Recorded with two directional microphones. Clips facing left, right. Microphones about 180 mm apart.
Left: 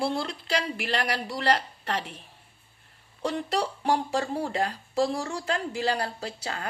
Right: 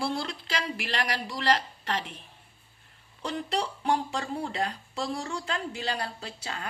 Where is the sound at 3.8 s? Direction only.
35° left (ahead or behind).